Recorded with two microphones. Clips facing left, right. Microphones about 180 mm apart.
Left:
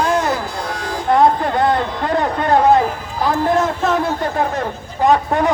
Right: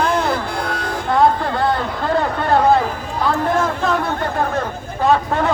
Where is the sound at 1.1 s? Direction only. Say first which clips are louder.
Left 2 dB; 20° left (ahead or behind).